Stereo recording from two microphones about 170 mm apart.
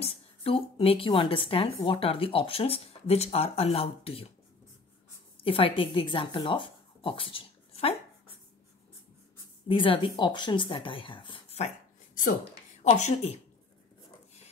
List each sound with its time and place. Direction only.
0.0 s a woman's voice: 35° left (ahead or behind)
5.4 s speech: 30° left (ahead or behind)
9.7 s speech: 30° left (ahead or behind)
12.9 s a woman's voice: 40° left (ahead or behind)